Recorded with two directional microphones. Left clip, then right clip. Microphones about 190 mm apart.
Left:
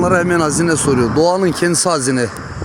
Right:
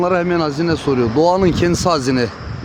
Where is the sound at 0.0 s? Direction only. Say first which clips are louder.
Left 2 dB; 5° left (ahead or behind).